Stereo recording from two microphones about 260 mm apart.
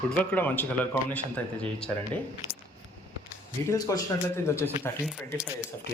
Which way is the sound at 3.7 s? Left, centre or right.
Centre.